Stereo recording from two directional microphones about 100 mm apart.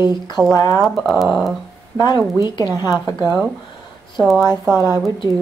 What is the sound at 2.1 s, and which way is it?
Speech, 30° right (ahead or behind).